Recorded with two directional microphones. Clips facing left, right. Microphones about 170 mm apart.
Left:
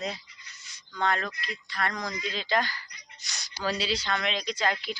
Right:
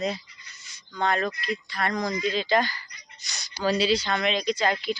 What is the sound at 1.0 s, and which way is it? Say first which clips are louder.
Speech: right 3 dB; 10° right (ahead or behind).